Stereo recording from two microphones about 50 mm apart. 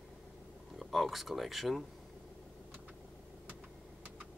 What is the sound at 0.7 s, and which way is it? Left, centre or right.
Speech, centre.